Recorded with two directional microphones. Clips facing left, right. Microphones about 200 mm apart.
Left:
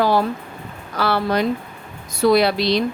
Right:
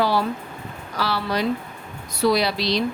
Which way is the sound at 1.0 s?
55° left (ahead or behind).